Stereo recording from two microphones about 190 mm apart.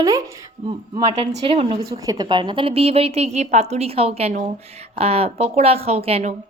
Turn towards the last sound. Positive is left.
turn(degrees=-35)  # may be behind; listen again after turning